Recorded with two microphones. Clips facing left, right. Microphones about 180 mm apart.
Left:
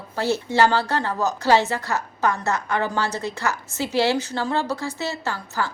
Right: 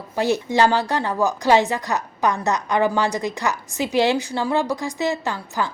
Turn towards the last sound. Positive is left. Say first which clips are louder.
# right 2 dB
turn(degrees=-15)  # may be behind; listen again after turning